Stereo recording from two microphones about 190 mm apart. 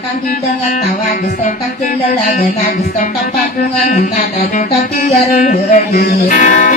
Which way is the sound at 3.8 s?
40° left (ahead or behind).